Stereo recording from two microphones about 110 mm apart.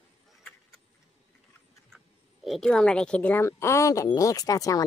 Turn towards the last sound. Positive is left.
turn(degrees=30)  # may be behind; listen again after turning